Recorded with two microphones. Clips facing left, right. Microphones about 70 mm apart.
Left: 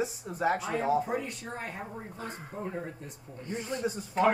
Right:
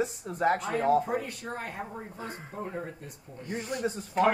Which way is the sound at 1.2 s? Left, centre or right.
Right.